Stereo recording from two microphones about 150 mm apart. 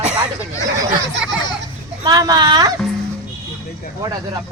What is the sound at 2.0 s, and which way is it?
Speech, 25° right (ahead or behind).